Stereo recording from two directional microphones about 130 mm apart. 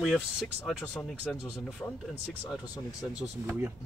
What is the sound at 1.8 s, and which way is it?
Speech, 20° left (ahead or behind).